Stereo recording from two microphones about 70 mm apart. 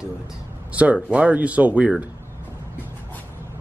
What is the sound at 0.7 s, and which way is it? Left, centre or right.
Speech, centre.